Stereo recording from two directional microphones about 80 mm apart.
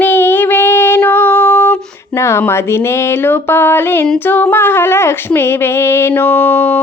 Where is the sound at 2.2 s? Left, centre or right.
Left.